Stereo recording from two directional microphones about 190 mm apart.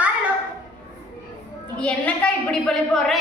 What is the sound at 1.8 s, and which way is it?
A woman's voice, 5° left (ahead or behind).